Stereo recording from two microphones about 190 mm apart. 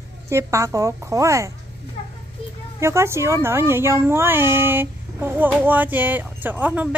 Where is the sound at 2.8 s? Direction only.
15° right (ahead or behind).